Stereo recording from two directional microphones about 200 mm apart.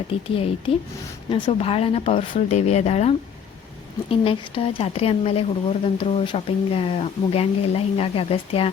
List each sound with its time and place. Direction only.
0.1 s speech: 30° left (ahead or behind)